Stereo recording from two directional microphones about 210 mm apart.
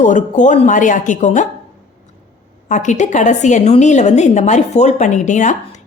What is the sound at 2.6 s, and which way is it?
A woman's voice, 35° left (ahead or behind).